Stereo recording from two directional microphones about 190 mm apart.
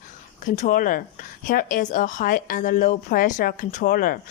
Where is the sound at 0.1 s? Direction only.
40° left (ahead or behind).